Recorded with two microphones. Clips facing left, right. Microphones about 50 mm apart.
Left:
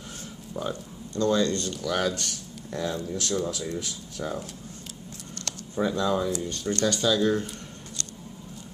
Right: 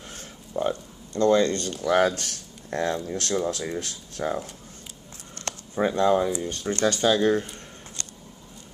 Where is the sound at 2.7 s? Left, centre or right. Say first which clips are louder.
Right 4 dB; right.